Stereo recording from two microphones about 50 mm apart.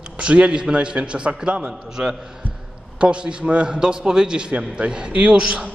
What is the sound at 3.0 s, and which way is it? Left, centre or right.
A man's voice, right.